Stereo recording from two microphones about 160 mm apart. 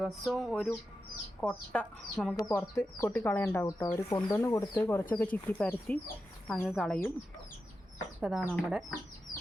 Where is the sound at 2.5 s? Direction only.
15° left (ahead or behind).